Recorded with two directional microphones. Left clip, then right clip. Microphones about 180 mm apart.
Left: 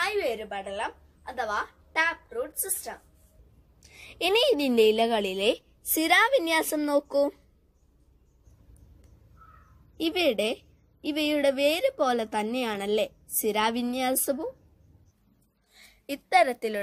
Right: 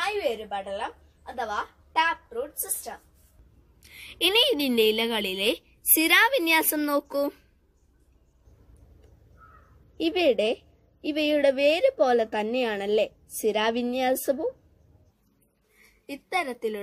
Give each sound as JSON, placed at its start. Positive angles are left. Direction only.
{"t": 0.0, "sound": "a woman's voice", "side_deg": 15}
{"t": 9.9, "sound": "a woman's voice", "side_deg": 35}
{"t": 16.1, "sound": "a woman's voice", "side_deg": 45}